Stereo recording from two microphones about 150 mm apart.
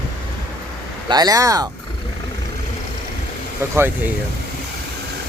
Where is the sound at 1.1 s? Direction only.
25° right (ahead or behind).